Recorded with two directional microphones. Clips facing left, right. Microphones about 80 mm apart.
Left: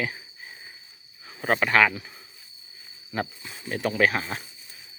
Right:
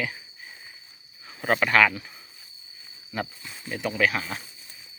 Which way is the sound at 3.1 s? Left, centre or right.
Left.